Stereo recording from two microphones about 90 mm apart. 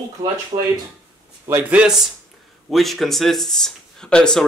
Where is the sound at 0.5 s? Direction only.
90° right.